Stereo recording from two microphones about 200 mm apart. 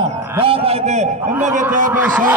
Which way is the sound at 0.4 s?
30° right (ahead or behind).